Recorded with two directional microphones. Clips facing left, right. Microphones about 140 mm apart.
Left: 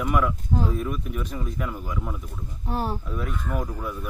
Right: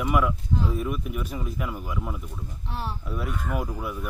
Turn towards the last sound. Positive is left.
turn(degrees=-10)  # may be behind; listen again after turning